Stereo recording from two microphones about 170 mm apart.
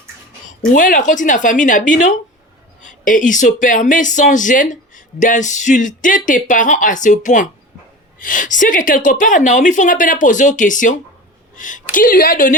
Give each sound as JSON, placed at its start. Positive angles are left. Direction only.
{"t": 0.6, "sound": "a woman's voice", "side_deg": 50}